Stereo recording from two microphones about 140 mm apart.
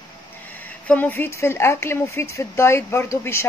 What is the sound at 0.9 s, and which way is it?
Speech, 15° left (ahead or behind).